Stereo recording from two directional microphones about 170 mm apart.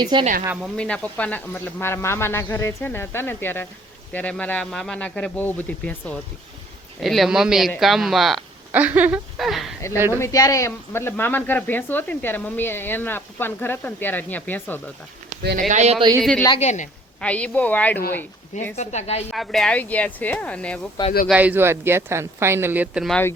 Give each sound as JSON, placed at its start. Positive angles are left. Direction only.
{"t": 0.0, "sound": "speech", "side_deg": -25}
{"t": 0.4, "sound": "speech", "side_deg": -5}
{"t": 0.8, "sound": "speech", "side_deg": 5}
{"t": 10.2, "sound": "speech", "side_deg": 20}
{"t": 15.7, "sound": "speech", "side_deg": -45}
{"t": 16.0, "sound": "speech", "side_deg": -25}
{"t": 16.6, "sound": "a woman's voice", "side_deg": 45}
{"t": 17.2, "sound": "speech", "side_deg": 5}
{"t": 18.8, "sound": "a woman's voice", "side_deg": 40}
{"t": 19.3, "sound": "speech", "side_deg": 0}
{"t": 21.2, "sound": "speech", "side_deg": -10}
{"t": 23.0, "sound": "speech", "side_deg": 5}